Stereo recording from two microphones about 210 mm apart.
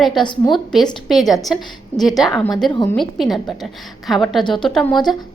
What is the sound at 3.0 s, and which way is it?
A woman's voice, centre (ahead or behind).